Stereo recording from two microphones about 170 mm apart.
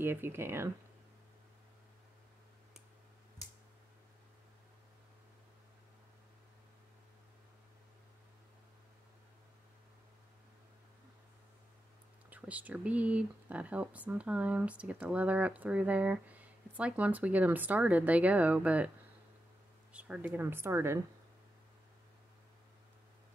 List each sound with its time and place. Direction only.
0.0 s speech: 15° right (ahead or behind)
12.3 s speech: 10° right (ahead or behind)
19.9 s speech: 5° right (ahead or behind)